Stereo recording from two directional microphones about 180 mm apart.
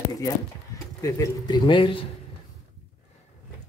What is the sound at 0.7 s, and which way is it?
Speech, 20° left (ahead or behind).